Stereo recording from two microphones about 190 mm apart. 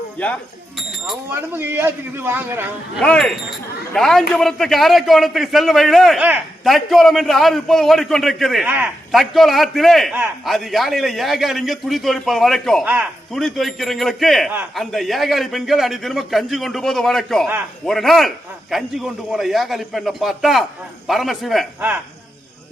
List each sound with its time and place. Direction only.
0.8 s a man's voice: centre (ahead or behind)
1.3 s a man's voice: 10° right (ahead or behind)
3.0 s a man's voice: 5° left (ahead or behind)